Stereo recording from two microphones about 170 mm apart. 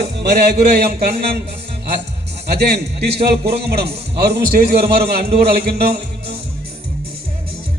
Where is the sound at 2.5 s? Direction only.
70° right (ahead or behind).